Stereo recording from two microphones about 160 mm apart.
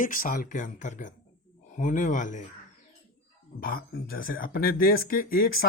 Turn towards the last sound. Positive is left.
turn(degrees=65)  # may be behind; listen again after turning